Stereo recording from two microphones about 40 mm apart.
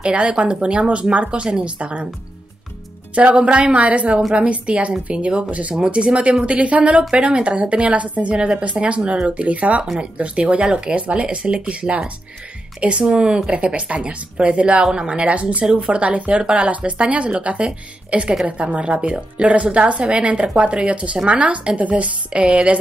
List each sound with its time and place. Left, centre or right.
0.0 s a woman's voice: right
3.2 s a woman's voice: right
7.1 s speech: right
8.4 s a woman's voice: right
14.8 s a woman's voice: centre